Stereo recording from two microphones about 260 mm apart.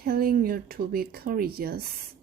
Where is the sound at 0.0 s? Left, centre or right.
Right.